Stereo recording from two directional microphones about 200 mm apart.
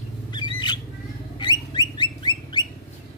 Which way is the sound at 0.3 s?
20° left (ahead or behind).